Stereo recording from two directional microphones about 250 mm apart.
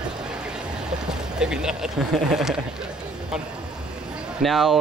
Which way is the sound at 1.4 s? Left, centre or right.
Centre.